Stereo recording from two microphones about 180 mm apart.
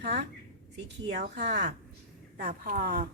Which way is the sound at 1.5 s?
70° right (ahead or behind).